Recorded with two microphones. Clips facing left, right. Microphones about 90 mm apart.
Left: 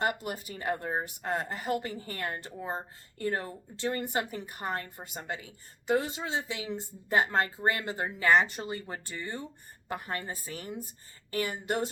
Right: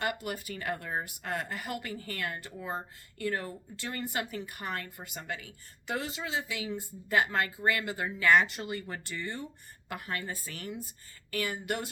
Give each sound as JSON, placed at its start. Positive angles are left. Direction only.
{"t": 0.0, "sound": "speech", "side_deg": 35}
{"t": 9.9, "sound": "a woman's voice", "side_deg": 30}
{"t": 11.3, "sound": "speech", "side_deg": 35}